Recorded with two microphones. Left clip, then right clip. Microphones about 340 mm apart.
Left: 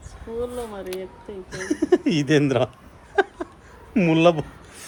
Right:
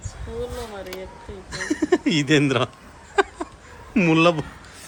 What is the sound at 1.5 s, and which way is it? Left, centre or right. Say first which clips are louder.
Speech: left 1 dB; centre.